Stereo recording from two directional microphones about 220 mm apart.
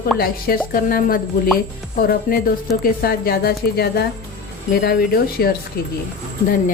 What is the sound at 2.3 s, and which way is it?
A woman's voice, 35° left (ahead or behind).